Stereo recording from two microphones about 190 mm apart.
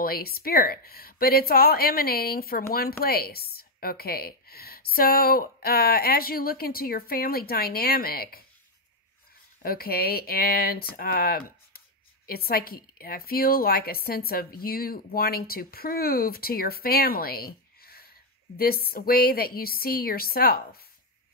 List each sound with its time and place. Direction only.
0.0 s a woman's voice: 50° left (ahead or behind)
9.6 s a woman's voice: 50° left (ahead or behind)